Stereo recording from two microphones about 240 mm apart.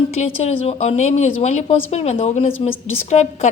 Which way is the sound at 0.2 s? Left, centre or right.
Left.